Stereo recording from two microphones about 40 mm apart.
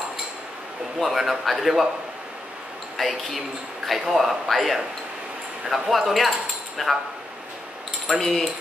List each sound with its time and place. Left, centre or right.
0.9 s a man's voice: centre
3.0 s speech: centre
3.8 s a man's voice: centre
8.2 s speech: centre